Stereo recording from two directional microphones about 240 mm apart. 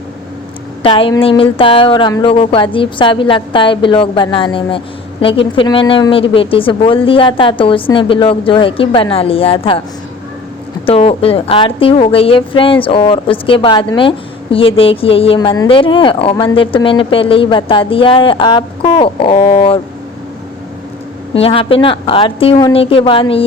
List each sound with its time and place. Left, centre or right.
0.8 s a woman's voice: left
10.8 s a woman's voice: left
21.3 s a woman's voice: left